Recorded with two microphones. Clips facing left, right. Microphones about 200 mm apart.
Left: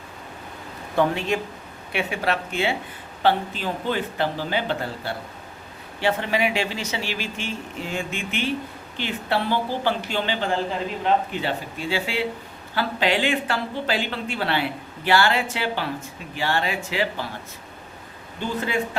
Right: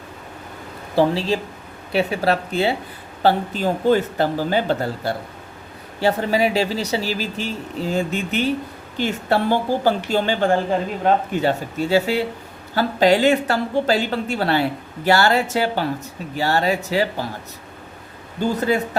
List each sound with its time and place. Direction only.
0.9 s speech: 30° right (ahead or behind)
18.3 s speech: 40° right (ahead or behind)